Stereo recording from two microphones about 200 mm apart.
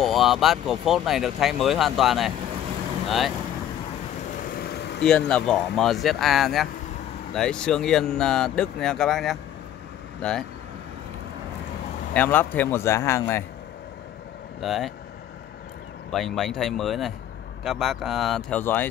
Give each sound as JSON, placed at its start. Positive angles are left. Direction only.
{"t": 0.0, "sound": "speech", "side_deg": 0}
{"t": 4.5, "sound": "vehicle", "side_deg": 50}
{"t": 5.3, "sound": "speech", "side_deg": 5}
{"t": 12.1, "sound": "speech", "side_deg": 10}
{"t": 14.6, "sound": "speech", "side_deg": 0}
{"t": 16.1, "sound": "speech", "side_deg": 0}